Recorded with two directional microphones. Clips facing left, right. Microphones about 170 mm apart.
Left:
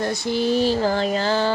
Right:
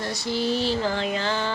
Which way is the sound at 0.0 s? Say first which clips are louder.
Left 5 dB; 50° left (ahead or behind).